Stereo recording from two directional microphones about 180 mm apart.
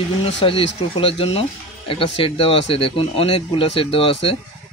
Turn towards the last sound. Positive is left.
turn(degrees=30)  # may be behind; listen again after turning